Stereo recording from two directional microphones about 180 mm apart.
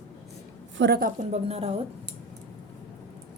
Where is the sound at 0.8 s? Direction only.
60° right (ahead or behind).